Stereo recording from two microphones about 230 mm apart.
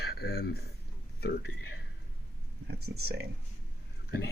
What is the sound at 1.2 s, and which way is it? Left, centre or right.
Speech, left.